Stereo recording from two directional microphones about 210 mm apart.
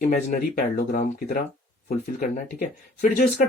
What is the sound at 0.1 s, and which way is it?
Speech, 45° left (ahead or behind).